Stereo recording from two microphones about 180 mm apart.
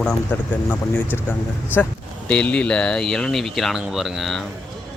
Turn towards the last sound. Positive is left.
turn(degrees=0)  # may be behind; listen again after turning